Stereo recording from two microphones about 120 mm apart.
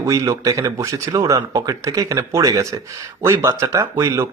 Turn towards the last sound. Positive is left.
turn(degrees=-25)  # may be behind; listen again after turning